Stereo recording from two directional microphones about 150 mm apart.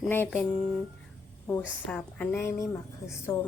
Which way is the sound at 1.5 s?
5° left (ahead or behind).